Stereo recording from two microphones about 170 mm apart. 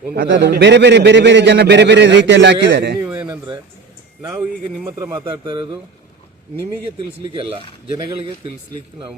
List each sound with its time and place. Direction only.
0.1 s a man's voice: 75° right (ahead or behind)
3.0 s a sound: 10° right (ahead or behind)
3.2 s speech: 25° right (ahead or behind)
4.9 s speech: 20° right (ahead or behind)
7.2 s speech: 30° right (ahead or behind)